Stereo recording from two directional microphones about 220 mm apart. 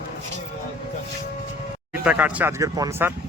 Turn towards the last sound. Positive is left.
turn(degrees=-15)  # may be behind; listen again after turning